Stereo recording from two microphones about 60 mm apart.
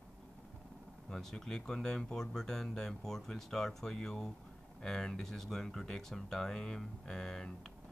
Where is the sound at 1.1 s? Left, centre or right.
Centre.